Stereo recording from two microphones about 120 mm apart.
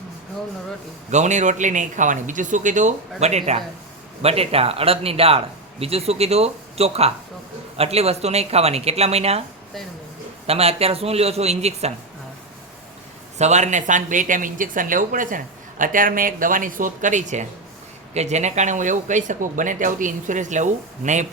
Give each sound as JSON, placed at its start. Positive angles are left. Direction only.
{"t": 1.1, "sound": "speech", "side_deg": -85}
{"t": 10.4, "sound": "speech", "side_deg": -55}
{"t": 13.4, "sound": "speech", "side_deg": -75}
{"t": 18.1, "sound": "speech", "side_deg": -70}